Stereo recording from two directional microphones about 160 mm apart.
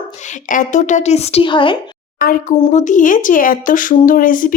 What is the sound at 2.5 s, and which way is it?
A woman's voice, 40° left (ahead or behind).